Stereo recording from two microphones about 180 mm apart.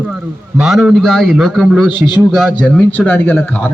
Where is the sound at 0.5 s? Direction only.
5° right (ahead or behind).